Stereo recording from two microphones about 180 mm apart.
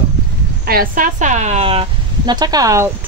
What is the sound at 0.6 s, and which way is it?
Speech, 55° right (ahead or behind).